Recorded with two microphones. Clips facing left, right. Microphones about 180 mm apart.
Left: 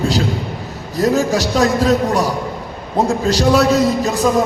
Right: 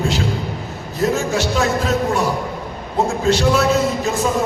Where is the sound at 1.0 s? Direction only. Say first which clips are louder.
Left 3 dB; 35° left (ahead or behind).